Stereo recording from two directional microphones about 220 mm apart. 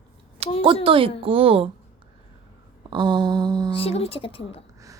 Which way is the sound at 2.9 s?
20° right (ahead or behind).